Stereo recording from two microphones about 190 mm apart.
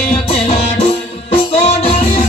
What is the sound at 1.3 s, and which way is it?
Music, 30° left (ahead or behind).